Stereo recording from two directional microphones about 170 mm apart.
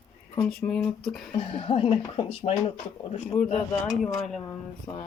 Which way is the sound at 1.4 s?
35° left (ahead or behind).